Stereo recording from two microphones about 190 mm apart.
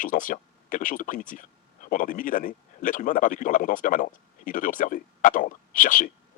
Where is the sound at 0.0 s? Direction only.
45° left (ahead or behind).